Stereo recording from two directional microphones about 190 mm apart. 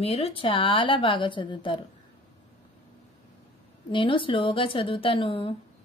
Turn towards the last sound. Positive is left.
turn(degrees=30)  # may be behind; listen again after turning